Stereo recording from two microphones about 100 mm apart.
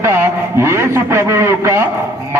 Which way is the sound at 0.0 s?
25° right (ahead or behind).